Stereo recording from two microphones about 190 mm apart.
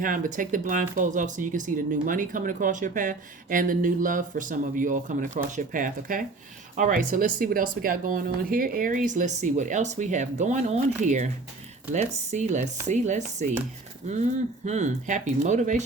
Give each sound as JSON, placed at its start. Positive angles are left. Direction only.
{"t": 0.0, "sound": "speech", "side_deg": -45}